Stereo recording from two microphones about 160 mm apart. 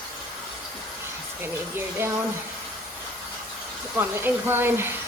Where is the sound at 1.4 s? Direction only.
15° right (ahead or behind).